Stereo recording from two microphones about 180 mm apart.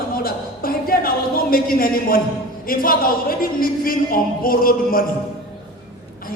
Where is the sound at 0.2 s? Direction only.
55° left (ahead or behind).